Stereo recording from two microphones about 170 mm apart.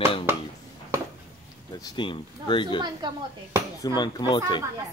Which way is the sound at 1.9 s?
30° left (ahead or behind).